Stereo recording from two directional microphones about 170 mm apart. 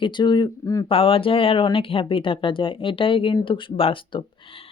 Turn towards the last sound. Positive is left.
turn(degrees=30)  # may be behind; listen again after turning